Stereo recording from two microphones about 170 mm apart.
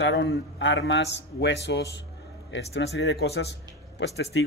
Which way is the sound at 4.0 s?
90° left.